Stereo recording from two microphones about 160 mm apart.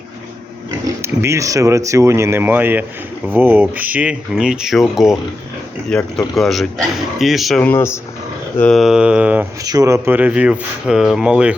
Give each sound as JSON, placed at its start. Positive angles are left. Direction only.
{"t": 0.9, "sound": "speech", "side_deg": -15}
{"t": 7.6, "sound": "speech", "side_deg": 15}
{"t": 8.5, "sound": "speech", "side_deg": 5}
{"t": 9.6, "sound": "speech", "side_deg": -20}